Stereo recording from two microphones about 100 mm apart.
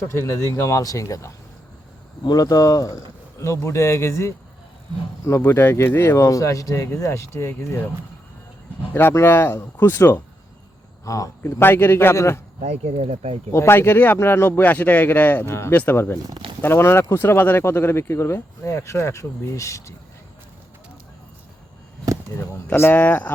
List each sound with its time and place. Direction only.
0.0 s speech: 25° left (ahead or behind)
8.9 s speech: 25° left (ahead or behind)
11.0 s speech: 35° left (ahead or behind)
11.6 s speech: 20° left (ahead or behind)
12.6 s speech: 90° right
13.5 s speech: 25° left (ahead or behind)
22.7 s speech: 20° left (ahead or behind)